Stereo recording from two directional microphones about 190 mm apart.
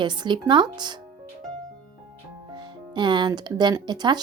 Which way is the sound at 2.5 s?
25° right (ahead or behind).